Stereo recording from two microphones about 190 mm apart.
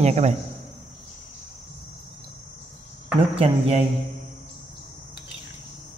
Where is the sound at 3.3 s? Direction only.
30° right (ahead or behind).